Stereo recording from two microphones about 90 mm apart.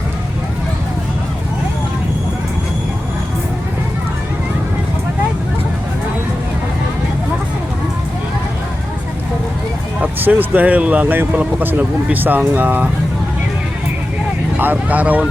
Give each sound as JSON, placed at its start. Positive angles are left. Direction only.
{"t": 10.0, "sound": "speech", "side_deg": -20}
{"t": 14.6, "sound": "speech", "side_deg": -20}